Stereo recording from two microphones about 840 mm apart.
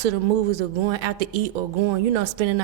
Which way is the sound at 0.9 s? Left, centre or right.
Right.